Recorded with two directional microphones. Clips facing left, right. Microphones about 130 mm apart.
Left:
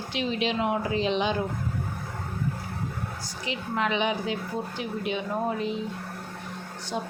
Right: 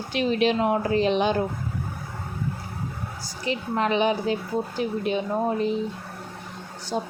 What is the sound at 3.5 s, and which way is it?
Speech, 40° right (ahead or behind).